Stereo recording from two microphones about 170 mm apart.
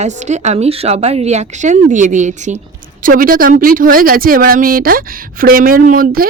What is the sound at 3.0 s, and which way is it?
A woman's voice, 55° right (ahead or behind).